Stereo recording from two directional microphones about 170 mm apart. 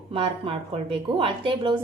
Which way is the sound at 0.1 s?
35° right (ahead or behind).